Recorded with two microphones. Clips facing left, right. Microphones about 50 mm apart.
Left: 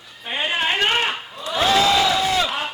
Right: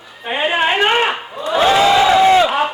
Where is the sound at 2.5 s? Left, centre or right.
Centre.